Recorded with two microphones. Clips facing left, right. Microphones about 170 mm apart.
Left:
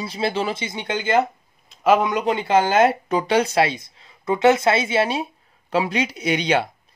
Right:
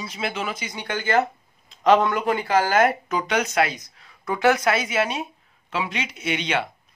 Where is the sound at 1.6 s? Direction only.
5° left (ahead or behind); by 6.7 s 35° left (ahead or behind).